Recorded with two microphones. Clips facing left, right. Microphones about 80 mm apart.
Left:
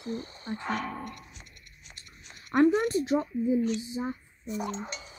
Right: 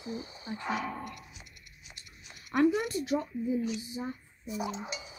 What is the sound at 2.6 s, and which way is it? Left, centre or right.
Speech, left.